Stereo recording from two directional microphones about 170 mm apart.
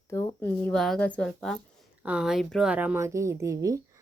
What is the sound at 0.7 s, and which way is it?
A woman's voice, 5° left (ahead or behind).